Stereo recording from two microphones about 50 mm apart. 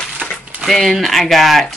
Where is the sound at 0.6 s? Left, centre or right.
Centre.